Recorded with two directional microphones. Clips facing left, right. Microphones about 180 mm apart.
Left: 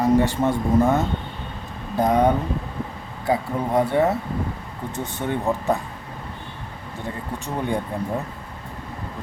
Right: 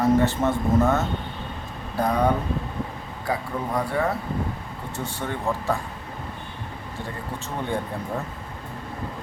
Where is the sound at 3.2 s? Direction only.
25° left (ahead or behind).